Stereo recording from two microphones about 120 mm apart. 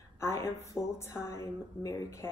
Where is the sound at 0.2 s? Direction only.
25° left (ahead or behind).